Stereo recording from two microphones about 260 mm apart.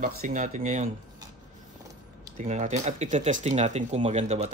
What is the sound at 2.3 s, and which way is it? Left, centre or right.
Speech, right.